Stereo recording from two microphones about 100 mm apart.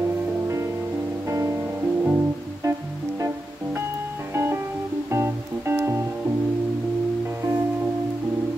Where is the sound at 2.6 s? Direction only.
30° right (ahead or behind).